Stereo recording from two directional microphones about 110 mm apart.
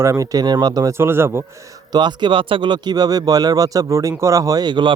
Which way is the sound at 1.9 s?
45° right (ahead or behind).